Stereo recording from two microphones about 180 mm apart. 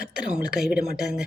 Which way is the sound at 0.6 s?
5° right (ahead or behind).